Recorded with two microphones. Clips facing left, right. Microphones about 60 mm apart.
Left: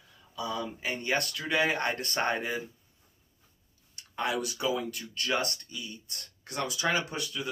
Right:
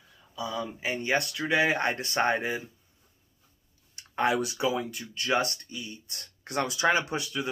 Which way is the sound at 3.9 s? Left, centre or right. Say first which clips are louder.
Right 5 dB; right.